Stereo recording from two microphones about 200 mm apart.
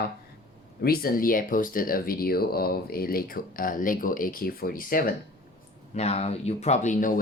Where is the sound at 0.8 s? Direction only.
45° left (ahead or behind).